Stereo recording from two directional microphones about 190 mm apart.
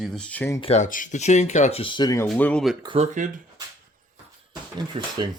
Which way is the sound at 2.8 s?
30° right (ahead or behind).